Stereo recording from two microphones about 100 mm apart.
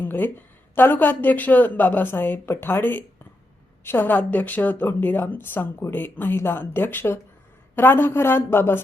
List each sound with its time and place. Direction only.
0.0 s a woman's voice: 20° left (ahead or behind)